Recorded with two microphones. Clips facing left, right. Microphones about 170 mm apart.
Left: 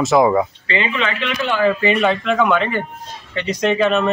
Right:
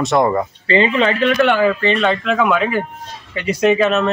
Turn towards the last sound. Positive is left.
turn(degrees=0)  # may be behind; listen again after turning